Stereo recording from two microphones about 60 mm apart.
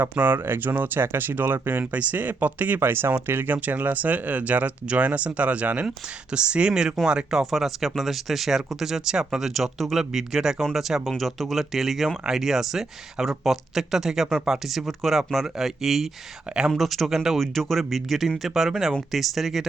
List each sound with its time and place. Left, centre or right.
0.0 s speech: right
1.8 s speech: right; by 19.6 s centre